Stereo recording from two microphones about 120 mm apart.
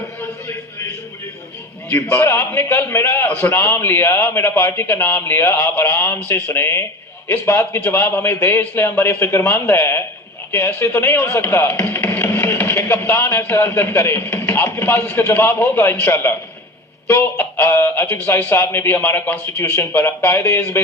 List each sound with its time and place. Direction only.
2.1 s a man's voice: 25° left (ahead or behind)